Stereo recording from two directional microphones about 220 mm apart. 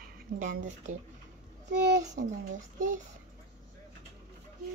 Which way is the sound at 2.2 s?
40° right (ahead or behind).